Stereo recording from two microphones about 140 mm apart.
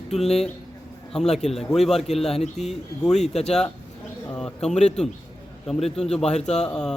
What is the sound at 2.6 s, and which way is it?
Speech, 55° left (ahead or behind).